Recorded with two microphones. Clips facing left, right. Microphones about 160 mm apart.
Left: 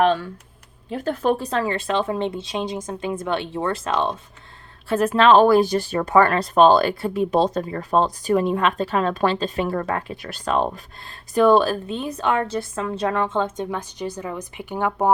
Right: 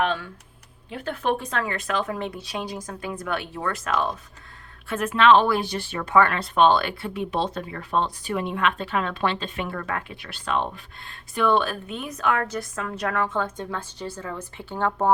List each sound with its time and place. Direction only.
0.0 s speech: 40° left (ahead or behind); by 15.1 s 15° left (ahead or behind)